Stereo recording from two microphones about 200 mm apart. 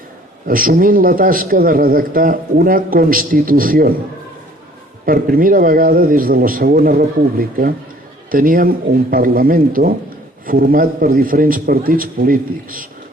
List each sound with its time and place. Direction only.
0.4 s a man's voice: 45° right (ahead or behind)
5.0 s a man's voice: 45° right (ahead or behind)